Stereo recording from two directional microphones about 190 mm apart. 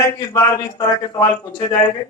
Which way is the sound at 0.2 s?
20° left (ahead or behind).